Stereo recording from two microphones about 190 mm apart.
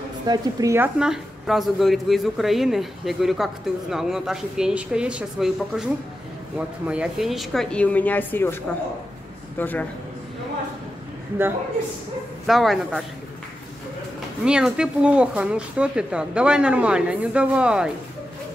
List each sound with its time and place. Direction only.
0.3 s a woman's voice: 15° right (ahead or behind)
0.9 s a woman's voice: 5° right (ahead or behind)
6.9 s speech: 5° right (ahead or behind)
9.6 s speech: 10° left (ahead or behind)
12.4 s a woman's voice: centre (ahead or behind)
14.4 s a woman's voice: 5° right (ahead or behind)